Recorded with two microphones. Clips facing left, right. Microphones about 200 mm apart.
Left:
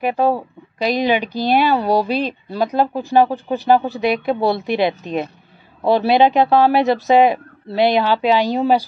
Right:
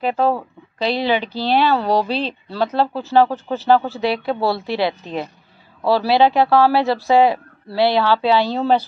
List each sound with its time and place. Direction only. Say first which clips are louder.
0.0 s speech: left 1 dB; 15° left (ahead or behind)